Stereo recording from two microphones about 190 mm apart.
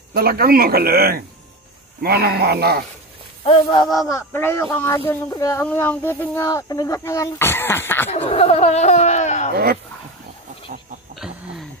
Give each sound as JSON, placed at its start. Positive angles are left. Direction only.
{"t": 0.1, "sound": "a man's voice", "side_deg": -55}
{"t": 3.6, "sound": "speech", "side_deg": 20}
{"t": 8.1, "sound": "speech", "side_deg": 35}
{"t": 9.5, "sound": "a man's voice", "side_deg": -55}
{"t": 11.1, "sound": "a sound", "side_deg": 0}